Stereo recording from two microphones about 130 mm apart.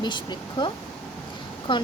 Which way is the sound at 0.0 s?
35° left (ahead or behind).